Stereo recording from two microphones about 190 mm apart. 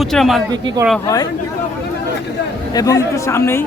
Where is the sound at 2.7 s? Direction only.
20° left (ahead or behind).